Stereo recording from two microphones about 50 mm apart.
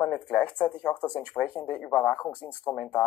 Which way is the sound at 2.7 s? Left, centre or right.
Left.